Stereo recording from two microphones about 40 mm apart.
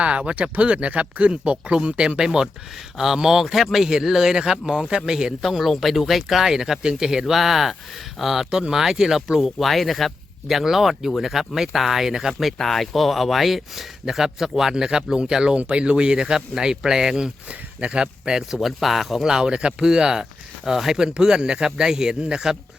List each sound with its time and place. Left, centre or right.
0.0 s speech: right
5.4 s speech: centre
8.4 s speech: right
8.7 s speech: centre
10.5 s speech: centre
17.5 s speech: right; by 19.2 s centre
19.2 s speech: centre
21.1 s speech: right